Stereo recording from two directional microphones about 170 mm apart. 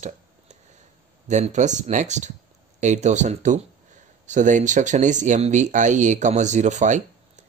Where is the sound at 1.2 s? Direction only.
45° right (ahead or behind).